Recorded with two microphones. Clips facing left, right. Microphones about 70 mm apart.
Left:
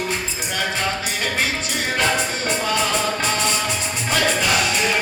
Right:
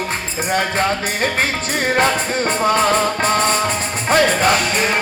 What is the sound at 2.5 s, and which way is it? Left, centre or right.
Music, right.